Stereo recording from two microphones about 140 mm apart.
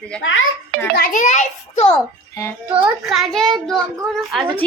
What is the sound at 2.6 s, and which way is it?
Speech, 35° right (ahead or behind).